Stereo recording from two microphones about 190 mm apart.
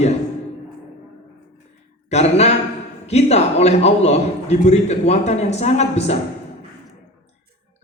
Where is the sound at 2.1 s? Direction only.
35° left (ahead or behind).